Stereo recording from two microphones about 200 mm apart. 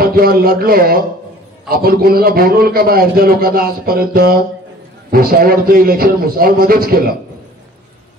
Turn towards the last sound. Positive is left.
turn(degrees=-50)  # may be behind; listen again after turning